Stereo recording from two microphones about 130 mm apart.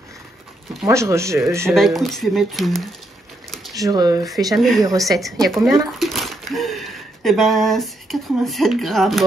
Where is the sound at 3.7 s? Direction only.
30° right (ahead or behind).